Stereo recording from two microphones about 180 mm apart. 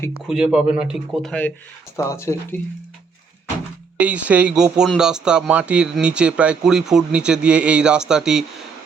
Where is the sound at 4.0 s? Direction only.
5° right (ahead or behind).